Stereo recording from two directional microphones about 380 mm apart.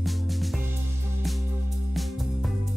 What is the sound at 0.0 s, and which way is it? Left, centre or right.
Music, centre.